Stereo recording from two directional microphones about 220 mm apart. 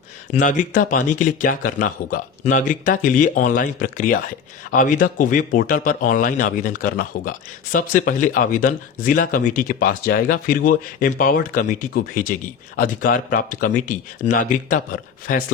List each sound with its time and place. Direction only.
0.3 s speech: 35° left (ahead or behind)